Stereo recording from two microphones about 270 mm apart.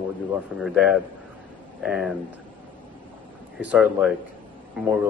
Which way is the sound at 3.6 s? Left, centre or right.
Centre.